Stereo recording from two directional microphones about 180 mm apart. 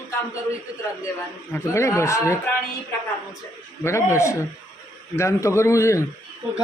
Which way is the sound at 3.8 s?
15° left (ahead or behind).